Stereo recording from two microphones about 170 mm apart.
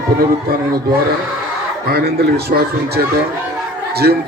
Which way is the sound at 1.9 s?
70° right (ahead or behind).